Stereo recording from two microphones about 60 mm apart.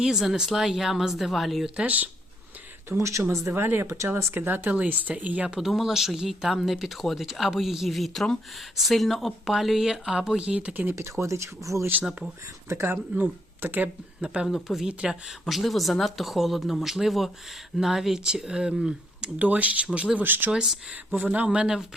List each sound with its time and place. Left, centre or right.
0.0 s speech: centre
1.6 s speech: centre
3.0 s speech: right
3.4 s speech: right
5.5 s speech: centre
11.2 s speech: right
12.6 s speech: right
13.1 s speech: right
14.4 s speech: centre
19.4 s speech: right
20.1 s speech: right
20.5 s speech: centre